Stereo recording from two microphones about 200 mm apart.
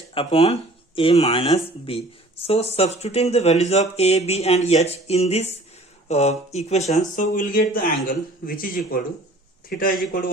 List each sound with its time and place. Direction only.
0.1 s speech: 30° left (ahead or behind); by 10.2 s 45° left (ahead or behind)